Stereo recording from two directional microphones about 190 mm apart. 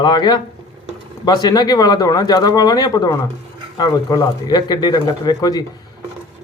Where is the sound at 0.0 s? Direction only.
20° left (ahead or behind).